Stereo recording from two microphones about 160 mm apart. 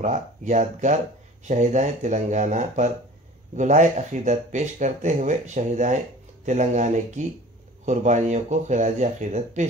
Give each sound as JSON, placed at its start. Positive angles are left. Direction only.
{"t": 0.0, "sound": "speech", "side_deg": -50}